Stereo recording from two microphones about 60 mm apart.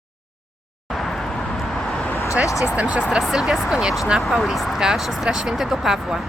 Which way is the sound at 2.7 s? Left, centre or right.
Right.